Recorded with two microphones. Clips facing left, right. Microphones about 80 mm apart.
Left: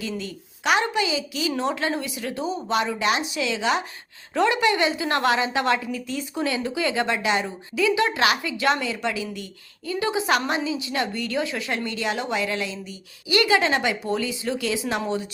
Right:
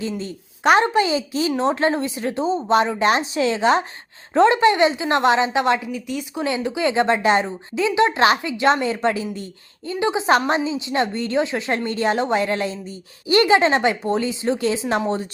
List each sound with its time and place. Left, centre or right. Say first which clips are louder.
0.2 s a woman's voice: right 6 dB; right
11.9 s a woman's voice: right 9 dB; right